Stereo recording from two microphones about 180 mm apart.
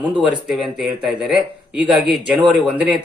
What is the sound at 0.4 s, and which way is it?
A man's voice, 5° right (ahead or behind).